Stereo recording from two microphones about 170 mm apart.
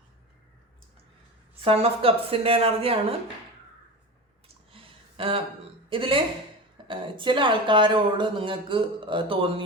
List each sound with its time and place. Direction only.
1.6 s speech: 35° right (ahead or behind)
4.4 s a sound: 35° right (ahead or behind)
5.9 s speech: 30° right (ahead or behind)